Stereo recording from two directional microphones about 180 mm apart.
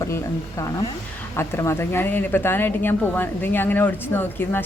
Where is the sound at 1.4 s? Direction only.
15° left (ahead or behind).